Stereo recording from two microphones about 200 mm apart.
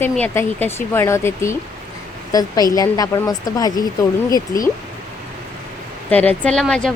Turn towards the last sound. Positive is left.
turn(degrees=5)  # may be behind; listen again after turning